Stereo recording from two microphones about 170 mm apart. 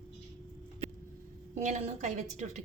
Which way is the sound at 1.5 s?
40° right (ahead or behind).